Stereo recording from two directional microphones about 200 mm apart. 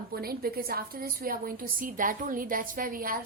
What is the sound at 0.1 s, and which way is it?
A woman's voice, 50° right (ahead or behind).